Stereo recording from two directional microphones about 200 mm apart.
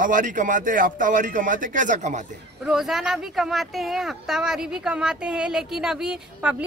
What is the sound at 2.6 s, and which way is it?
Speech, centre (ahead or behind).